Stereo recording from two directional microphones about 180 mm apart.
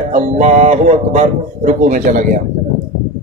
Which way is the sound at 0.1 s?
40° right (ahead or behind).